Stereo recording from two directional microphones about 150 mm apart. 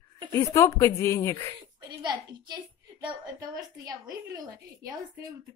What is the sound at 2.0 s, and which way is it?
Speech, 30° right (ahead or behind).